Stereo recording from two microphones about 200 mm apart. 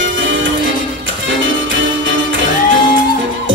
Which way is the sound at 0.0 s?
70° right (ahead or behind).